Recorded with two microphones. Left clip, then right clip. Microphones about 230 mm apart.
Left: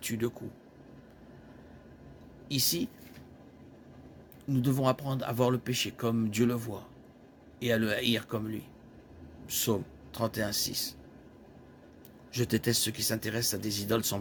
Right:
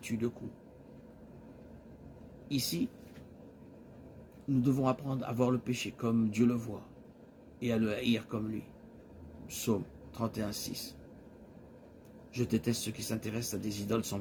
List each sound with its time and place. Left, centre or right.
0.0 s speech: left
2.5 s speech: left
4.4 s speech: left
12.3 s speech: left